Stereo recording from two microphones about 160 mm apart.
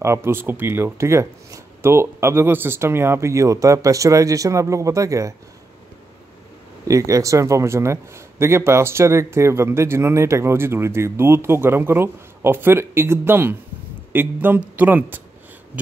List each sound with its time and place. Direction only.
0.0 s a man's voice: 15° right (ahead or behind)
6.9 s a man's voice: 20° right (ahead or behind)